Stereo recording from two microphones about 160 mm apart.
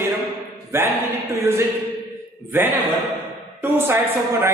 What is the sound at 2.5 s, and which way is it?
A woman's voice, 15° right (ahead or behind).